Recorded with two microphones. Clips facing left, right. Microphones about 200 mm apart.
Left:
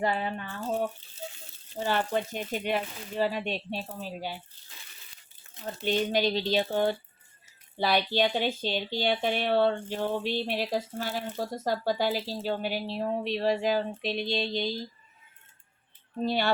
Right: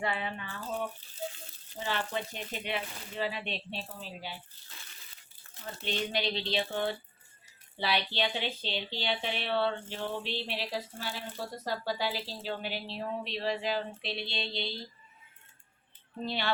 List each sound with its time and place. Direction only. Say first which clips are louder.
0.0 s a sound: left 5 dB; 40° left (ahead or behind)
1.8 s speech: left 6 dB; 45° left (ahead or behind)
5.8 s speech: left 7 dB; 45° left (ahead or behind)
16.2 s speech: left 7 dB; 45° left (ahead or behind)